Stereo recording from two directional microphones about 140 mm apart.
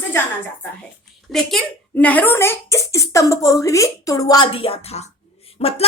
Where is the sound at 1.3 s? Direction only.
5° left (ahead or behind); by 4.4 s 25° left (ahead or behind).